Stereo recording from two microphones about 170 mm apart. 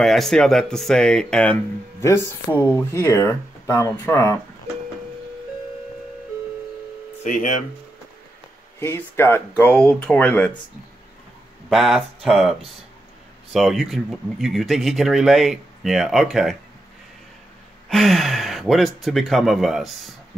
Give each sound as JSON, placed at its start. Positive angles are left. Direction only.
{"t": 0.0, "sound": "speech", "side_deg": 0}
{"t": 7.2, "sound": "speech", "side_deg": 50}
{"t": 8.7, "sound": "speech", "side_deg": 15}
{"t": 11.7, "sound": "speech", "side_deg": 0}
{"t": 17.8, "sound": "speech", "side_deg": 0}